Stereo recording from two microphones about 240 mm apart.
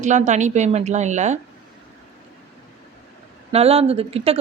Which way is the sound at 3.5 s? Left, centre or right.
Right.